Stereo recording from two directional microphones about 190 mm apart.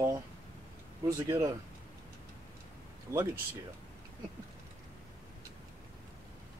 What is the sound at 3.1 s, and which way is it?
Speech, 15° right (ahead or behind).